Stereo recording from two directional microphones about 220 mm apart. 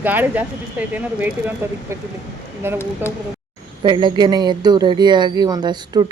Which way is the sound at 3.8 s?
20° right (ahead or behind).